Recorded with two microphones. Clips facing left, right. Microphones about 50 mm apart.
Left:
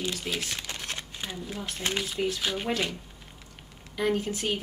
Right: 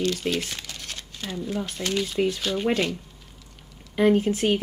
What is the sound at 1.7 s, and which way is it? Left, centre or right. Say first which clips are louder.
Speech: right 1 dB; centre.